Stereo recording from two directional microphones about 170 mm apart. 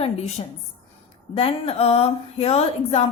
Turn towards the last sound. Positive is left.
turn(degrees=35)  # may be behind; listen again after turning